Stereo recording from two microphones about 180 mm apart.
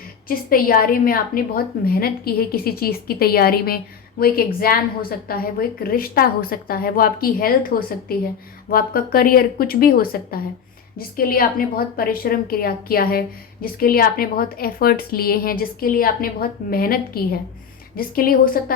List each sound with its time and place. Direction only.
0.3 s a woman's voice: 55° left (ahead or behind)